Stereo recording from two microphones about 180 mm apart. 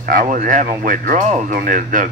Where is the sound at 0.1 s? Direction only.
45° right (ahead or behind).